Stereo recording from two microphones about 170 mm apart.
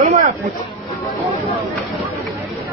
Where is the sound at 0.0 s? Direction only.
50° right (ahead or behind).